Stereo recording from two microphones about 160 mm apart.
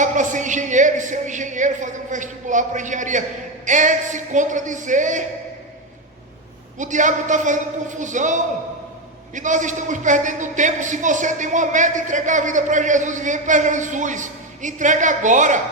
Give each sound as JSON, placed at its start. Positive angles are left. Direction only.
{"t": 0.0, "sound": "a man's voice", "side_deg": -50}
{"t": 6.7, "sound": "a man's voice", "side_deg": -50}